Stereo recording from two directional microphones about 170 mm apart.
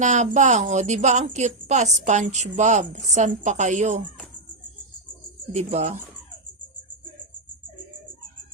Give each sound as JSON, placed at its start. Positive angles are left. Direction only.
{"t": 0.0, "sound": "a woman's voice", "side_deg": -45}
{"t": 5.5, "sound": "speech", "side_deg": -40}